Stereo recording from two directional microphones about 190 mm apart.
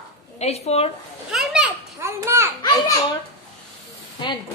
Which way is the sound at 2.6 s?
20° left (ahead or behind).